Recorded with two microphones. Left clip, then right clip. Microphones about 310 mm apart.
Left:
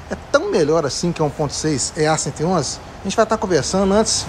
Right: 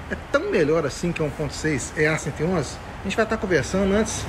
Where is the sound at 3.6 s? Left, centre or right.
Centre.